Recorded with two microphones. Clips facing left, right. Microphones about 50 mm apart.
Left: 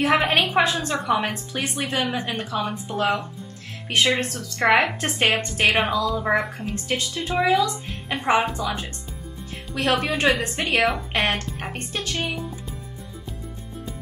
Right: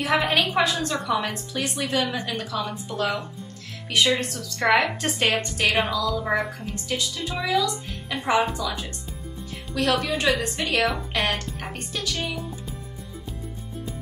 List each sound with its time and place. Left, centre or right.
0.0 s a woman's voice: left
4.6 s a woman's voice: left